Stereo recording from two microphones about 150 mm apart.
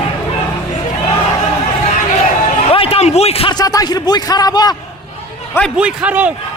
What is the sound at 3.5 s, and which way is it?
A man's voice, 25° left (ahead or behind).